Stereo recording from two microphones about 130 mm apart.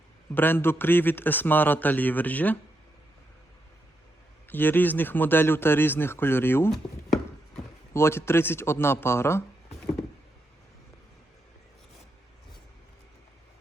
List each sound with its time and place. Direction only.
0.3 s a man's voice: 15° left (ahead or behind)
4.4 s a man's voice: 15° left (ahead or behind)
6.7 s chopping: 5° left (ahead or behind)
7.9 s speech: 20° left (ahead or behind)